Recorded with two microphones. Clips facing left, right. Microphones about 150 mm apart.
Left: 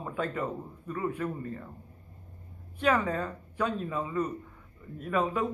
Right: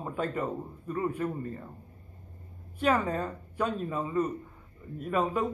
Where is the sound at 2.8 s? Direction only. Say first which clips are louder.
Even; 30° right (ahead or behind).